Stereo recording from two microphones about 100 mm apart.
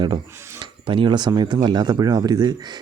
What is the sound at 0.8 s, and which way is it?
Speech, 55° right (ahead or behind).